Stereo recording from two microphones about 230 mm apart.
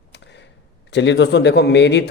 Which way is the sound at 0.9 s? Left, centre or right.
Left.